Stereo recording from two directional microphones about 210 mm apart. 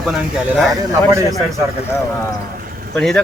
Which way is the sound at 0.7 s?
15° right (ahead or behind).